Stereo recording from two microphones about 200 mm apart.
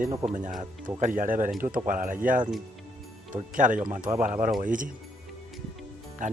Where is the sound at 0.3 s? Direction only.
40° right (ahead or behind).